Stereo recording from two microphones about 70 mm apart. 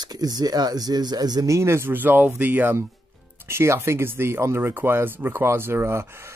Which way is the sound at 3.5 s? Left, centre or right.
Right.